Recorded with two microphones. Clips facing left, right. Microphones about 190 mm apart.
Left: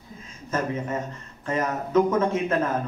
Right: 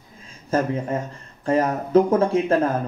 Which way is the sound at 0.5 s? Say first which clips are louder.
Right 5 dB; 30° right (ahead or behind).